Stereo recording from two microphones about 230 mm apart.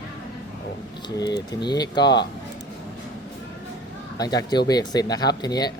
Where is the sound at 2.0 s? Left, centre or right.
Left.